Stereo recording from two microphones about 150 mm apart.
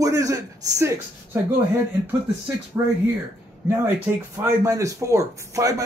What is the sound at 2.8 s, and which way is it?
Speech, 15° right (ahead or behind).